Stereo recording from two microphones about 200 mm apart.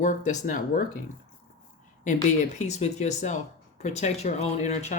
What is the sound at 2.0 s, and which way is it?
Speech, 35° left (ahead or behind).